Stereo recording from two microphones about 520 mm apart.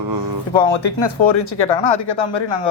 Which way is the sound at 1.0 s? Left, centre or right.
Left.